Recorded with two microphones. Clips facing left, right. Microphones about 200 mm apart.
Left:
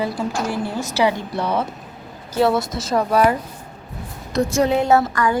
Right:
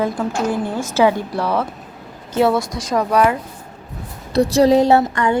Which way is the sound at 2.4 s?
5° left (ahead or behind).